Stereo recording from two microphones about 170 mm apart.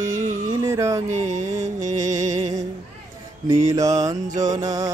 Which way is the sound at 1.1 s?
45° right (ahead or behind).